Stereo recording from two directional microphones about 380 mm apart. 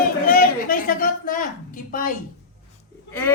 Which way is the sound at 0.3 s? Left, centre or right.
Left.